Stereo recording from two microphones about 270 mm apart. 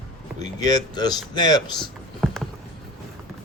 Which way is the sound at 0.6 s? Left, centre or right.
Centre.